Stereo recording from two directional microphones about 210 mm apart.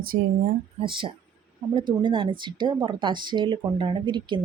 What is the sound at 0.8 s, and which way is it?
A woman's voice, 25° right (ahead or behind).